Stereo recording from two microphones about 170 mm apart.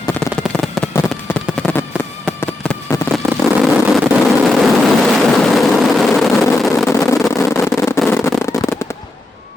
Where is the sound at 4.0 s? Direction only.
Centre (ahead or behind).